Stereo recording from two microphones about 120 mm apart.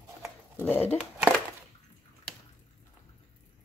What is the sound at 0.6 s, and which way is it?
Speech, 15° left (ahead or behind).